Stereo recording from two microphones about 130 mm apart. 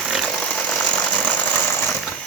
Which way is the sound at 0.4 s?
10° left (ahead or behind).